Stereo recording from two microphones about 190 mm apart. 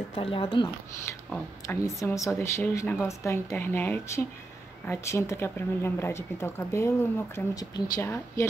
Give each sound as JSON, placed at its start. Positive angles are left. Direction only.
{"t": 0.1, "sound": "speech", "side_deg": 30}
{"t": 1.3, "sound": "speech", "side_deg": 15}